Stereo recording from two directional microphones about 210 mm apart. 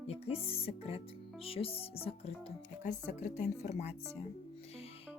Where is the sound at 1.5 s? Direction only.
25° left (ahead or behind).